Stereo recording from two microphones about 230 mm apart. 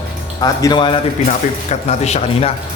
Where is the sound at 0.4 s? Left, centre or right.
Centre.